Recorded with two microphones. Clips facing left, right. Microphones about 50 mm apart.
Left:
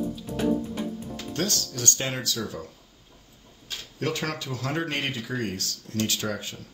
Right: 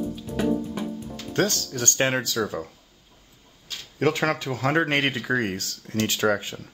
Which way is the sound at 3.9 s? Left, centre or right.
Right.